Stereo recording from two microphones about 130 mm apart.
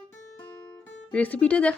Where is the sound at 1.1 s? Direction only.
10° left (ahead or behind).